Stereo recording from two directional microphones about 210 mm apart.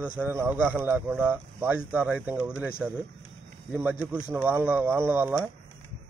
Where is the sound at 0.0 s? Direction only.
10° right (ahead or behind).